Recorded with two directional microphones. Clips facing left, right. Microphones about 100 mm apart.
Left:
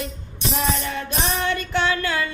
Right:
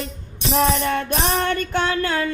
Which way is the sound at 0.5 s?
55° right (ahead or behind).